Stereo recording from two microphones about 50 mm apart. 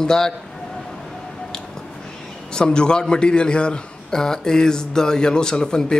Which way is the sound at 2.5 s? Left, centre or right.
Centre.